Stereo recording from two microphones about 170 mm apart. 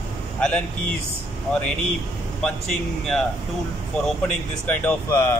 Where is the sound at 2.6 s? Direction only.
5° left (ahead or behind).